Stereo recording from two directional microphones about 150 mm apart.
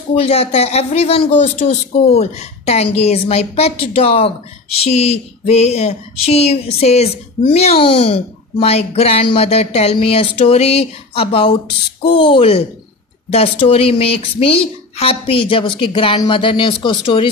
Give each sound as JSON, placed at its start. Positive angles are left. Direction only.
{"t": 0.1, "sound": "speech", "side_deg": 40}
{"t": 1.4, "sound": "a sound", "side_deg": 45}
{"t": 12.0, "sound": "speech", "side_deg": 35}